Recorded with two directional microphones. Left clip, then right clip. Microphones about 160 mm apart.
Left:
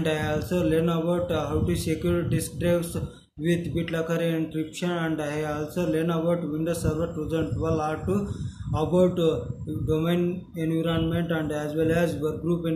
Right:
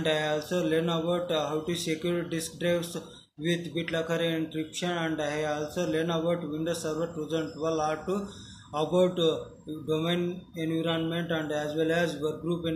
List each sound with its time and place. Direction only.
0.0 s speech: 30° left (ahead or behind)